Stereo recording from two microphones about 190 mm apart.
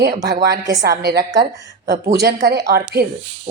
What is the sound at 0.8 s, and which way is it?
Speech, 60° right (ahead or behind).